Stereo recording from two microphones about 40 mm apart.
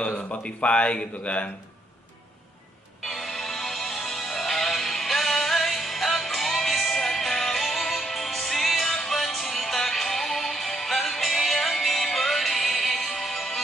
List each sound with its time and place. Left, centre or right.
0.1 s speech: left
0.4 s speech: left
3.1 s music: centre